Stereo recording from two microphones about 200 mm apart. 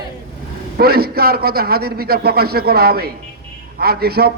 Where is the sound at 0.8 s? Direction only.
50° right (ahead or behind).